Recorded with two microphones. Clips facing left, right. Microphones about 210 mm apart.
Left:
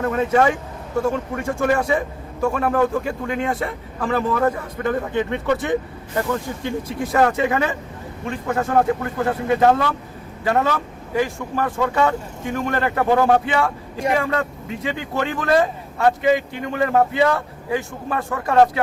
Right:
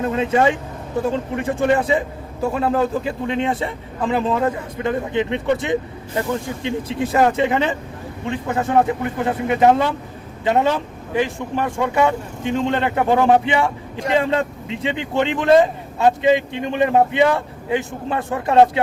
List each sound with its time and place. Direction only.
0.0 s a man's voice: 20° right (ahead or behind)